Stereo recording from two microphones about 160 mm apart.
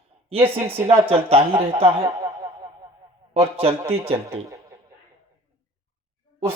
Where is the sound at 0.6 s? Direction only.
35° right (ahead or behind).